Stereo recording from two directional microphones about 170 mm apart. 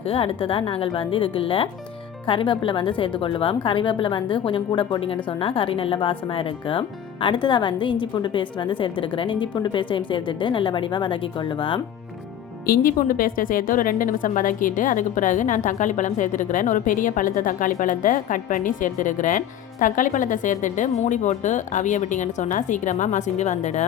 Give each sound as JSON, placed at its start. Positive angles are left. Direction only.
{"t": 0.1, "sound": "a woman's voice", "side_deg": 35}
{"t": 12.6, "sound": "a woman's voice", "side_deg": 55}